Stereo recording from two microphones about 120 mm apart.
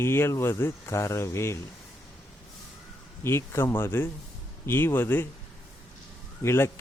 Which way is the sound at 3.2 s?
20° left (ahead or behind).